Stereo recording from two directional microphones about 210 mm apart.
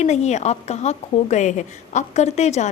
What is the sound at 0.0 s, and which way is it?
A woman's voice, 35° left (ahead or behind).